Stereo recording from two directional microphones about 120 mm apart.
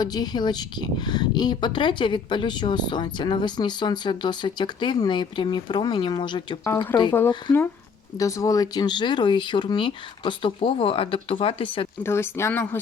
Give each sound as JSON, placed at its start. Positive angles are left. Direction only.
{"t": 0.0, "sound": "speech", "side_deg": 35}
{"t": 8.2, "sound": "speech", "side_deg": 30}
{"t": 12.0, "sound": "speech", "side_deg": 20}